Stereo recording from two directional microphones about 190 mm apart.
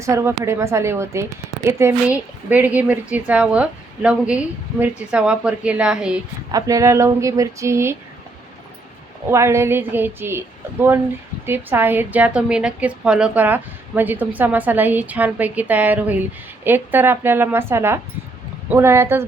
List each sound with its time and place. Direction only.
0.0 s a woman's voice: 15° right (ahead or behind)
6.5 s a woman's voice: 20° right (ahead or behind)
9.3 s a woman's voice: 15° right (ahead or behind)